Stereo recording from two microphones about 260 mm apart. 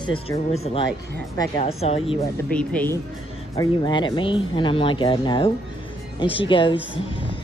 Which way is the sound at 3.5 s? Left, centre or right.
Centre.